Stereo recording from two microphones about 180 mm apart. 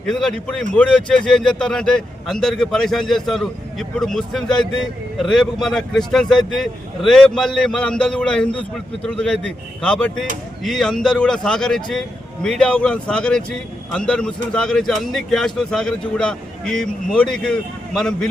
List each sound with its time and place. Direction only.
0.1 s speech: 5° left (ahead or behind)